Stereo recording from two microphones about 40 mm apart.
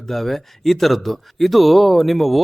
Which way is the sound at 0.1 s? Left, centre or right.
Centre.